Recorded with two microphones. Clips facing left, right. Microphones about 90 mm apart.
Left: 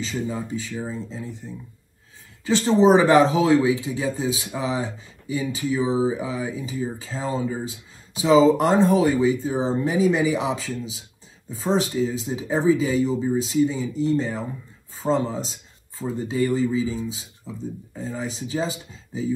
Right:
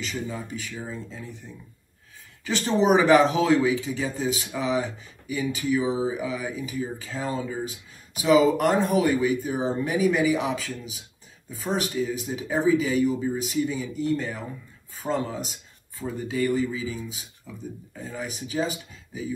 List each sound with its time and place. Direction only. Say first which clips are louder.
0.0 s speech: left 4 dB; 20° left (ahead or behind)